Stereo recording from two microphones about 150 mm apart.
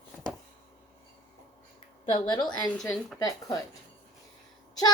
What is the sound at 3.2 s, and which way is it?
Speech, 25° left (ahead or behind).